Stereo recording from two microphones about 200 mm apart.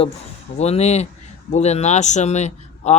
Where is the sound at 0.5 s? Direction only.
35° left (ahead or behind).